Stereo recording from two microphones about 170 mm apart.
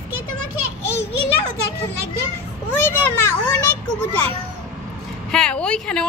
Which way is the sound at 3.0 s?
15° left (ahead or behind).